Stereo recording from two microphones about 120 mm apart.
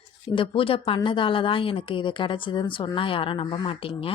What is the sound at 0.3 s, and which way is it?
A woman's voice, 45° left (ahead or behind).